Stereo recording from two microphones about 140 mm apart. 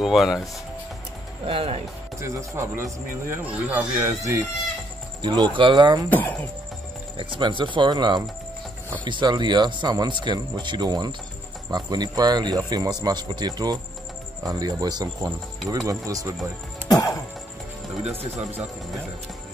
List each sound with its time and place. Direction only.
0.0 s speech: centre (ahead or behind)
1.4 s speech: 40° right (ahead or behind)
2.1 s a man's voice: 20° right (ahead or behind)
5.2 s speech: 35° right (ahead or behind)
6.0 s speech: 15° left (ahead or behind)
7.2 s a man's voice: 35° right (ahead or behind)
16.9 s music: 25° left (ahead or behind)